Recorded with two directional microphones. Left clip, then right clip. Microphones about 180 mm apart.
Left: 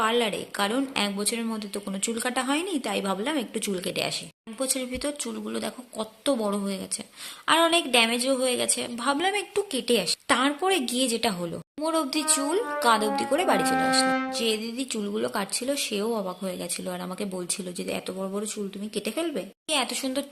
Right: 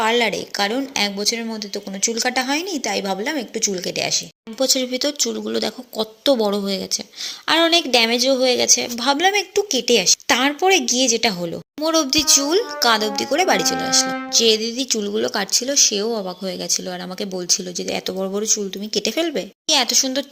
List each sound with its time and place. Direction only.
0.0 s a woman's voice: 20° right (ahead or behind)
14.0 s music: centre (ahead or behind)
14.3 s a woman's voice: 25° right (ahead or behind)